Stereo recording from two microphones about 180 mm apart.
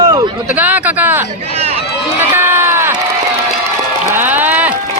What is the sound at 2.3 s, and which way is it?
Run, 15° right (ahead or behind).